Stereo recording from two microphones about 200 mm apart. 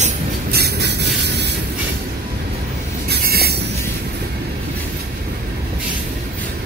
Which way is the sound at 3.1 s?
50° right (ahead or behind).